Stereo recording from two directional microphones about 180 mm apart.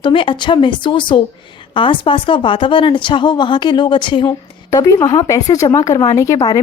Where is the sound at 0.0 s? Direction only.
30° left (ahead or behind).